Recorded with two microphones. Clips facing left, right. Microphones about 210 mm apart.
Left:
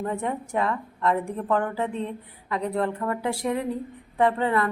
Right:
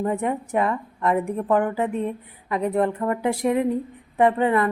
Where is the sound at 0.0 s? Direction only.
15° right (ahead or behind).